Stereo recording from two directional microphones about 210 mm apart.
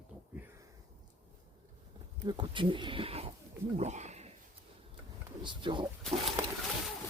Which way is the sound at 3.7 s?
35° right (ahead or behind).